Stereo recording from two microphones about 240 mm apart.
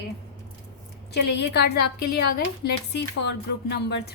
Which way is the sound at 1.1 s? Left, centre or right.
Left.